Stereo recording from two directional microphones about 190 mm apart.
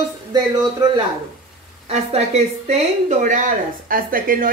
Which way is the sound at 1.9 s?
35° right (ahead or behind).